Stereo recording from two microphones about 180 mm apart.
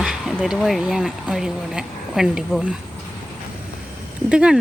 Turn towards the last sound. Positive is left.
turn(degrees=-5)  # may be behind; listen again after turning